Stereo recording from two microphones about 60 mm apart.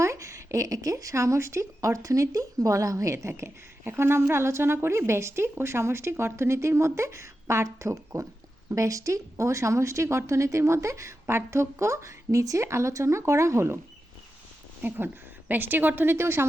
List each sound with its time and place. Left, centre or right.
0.0 s speech: right
14.8 s a woman's voice: right